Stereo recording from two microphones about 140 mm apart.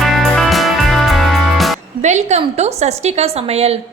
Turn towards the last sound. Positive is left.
turn(degrees=-50)  # may be behind; listen again after turning